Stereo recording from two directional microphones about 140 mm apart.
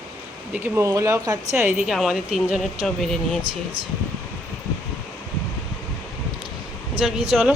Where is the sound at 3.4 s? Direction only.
35° right (ahead or behind).